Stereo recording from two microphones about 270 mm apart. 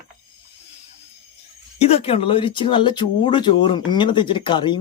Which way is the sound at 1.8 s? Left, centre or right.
Left.